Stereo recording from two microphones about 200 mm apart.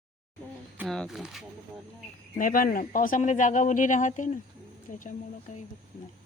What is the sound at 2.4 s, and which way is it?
Speech, 45° left (ahead or behind).